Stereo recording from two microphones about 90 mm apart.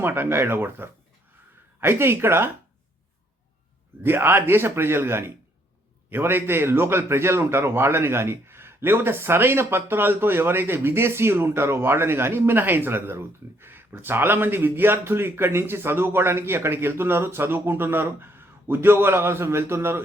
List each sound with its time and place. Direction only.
0.0 s a man's voice: 25° right (ahead or behind)
4.0 s a man's voice: 25° right (ahead or behind)